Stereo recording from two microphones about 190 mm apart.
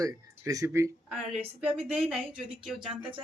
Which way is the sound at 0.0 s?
15° right (ahead or behind).